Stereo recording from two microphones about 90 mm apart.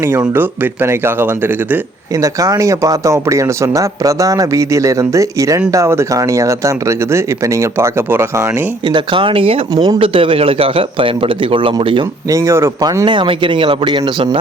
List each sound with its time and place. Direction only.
0.2 s speech: 20° right (ahead or behind)
2.2 s speech: 40° right (ahead or behind)
8.9 s a man's voice: 65° right (ahead or behind); by 9.6 s 90° right
9.7 s speech: 50° right (ahead or behind)
10.0 s a man's voice: 75° right (ahead or behind)
12.3 s speech: 35° right (ahead or behind)
13.1 s speech: 65° right (ahead or behind)